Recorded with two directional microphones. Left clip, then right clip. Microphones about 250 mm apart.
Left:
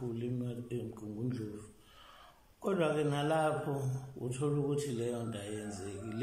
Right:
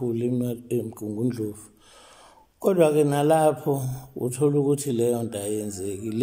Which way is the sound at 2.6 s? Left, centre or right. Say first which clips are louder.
Right 13 dB; right.